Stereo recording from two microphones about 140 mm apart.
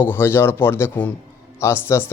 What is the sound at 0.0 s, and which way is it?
Speech, 15° left (ahead or behind).